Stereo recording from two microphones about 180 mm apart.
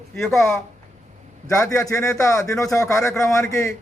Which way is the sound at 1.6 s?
20° left (ahead or behind).